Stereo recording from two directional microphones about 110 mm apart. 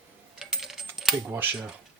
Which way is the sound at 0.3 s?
5° right (ahead or behind).